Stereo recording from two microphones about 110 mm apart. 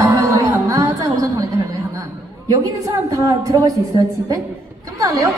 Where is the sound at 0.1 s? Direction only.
30° right (ahead or behind).